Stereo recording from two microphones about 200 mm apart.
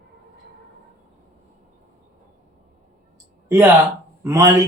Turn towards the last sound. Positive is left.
turn(degrees=-15)  # may be behind; listen again after turning